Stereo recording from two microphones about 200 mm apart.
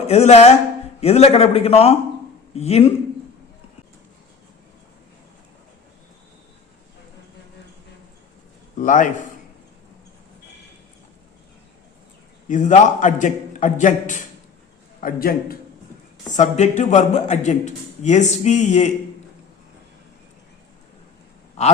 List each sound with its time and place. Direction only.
0.1 s a man's voice: 30° left (ahead or behind)
8.8 s a man's voice: 40° left (ahead or behind)
12.5 s a man's voice: 40° left (ahead or behind)
16.3 s a man's voice: 35° left (ahead or behind)